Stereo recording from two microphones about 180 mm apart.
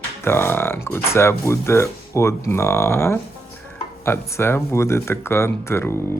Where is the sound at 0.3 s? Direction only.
10° left (ahead or behind).